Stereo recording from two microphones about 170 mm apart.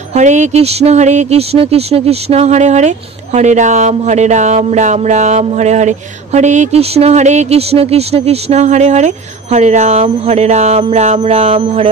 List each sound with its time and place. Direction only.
0.1 s speech: 45° right (ahead or behind)